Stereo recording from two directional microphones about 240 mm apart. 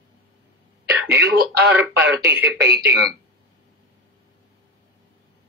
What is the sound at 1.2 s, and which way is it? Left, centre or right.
Speech, right.